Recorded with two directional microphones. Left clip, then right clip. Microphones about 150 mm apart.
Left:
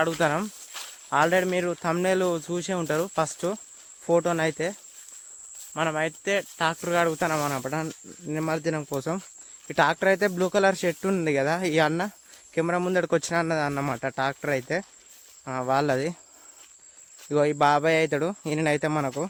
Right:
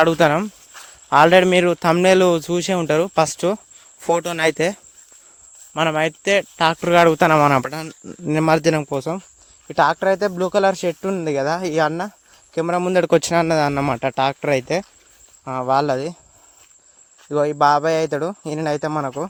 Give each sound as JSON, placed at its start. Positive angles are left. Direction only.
{"t": 0.0, "sound": "a man's voice", "side_deg": -65}
{"t": 1.1, "sound": "a man's voice", "side_deg": -90}
{"t": 4.0, "sound": "speech", "side_deg": -90}
{"t": 4.4, "sound": "cricket", "side_deg": -70}
{"t": 7.7, "sound": "a man's voice", "side_deg": 0}
{"t": 8.3, "sound": "speech", "side_deg": -90}
{"t": 8.9, "sound": "speech", "side_deg": -25}
{"t": 9.6, "sound": "speech", "side_deg": -15}
{"t": 12.5, "sound": "speech", "side_deg": -25}
{"t": 12.9, "sound": "speech", "side_deg": -40}
{"t": 15.4, "sound": "speech", "side_deg": -25}
{"t": 17.2, "sound": "a man's voice", "side_deg": -5}